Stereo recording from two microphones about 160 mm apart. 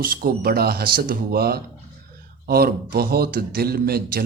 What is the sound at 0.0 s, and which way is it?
A man's voice, 65° right (ahead or behind).